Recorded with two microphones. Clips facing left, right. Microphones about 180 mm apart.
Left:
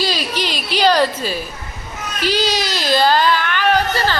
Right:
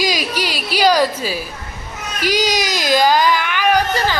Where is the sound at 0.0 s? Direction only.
10° right (ahead or behind).